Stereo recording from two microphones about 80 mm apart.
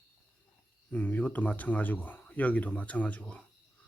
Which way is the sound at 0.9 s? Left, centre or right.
Centre.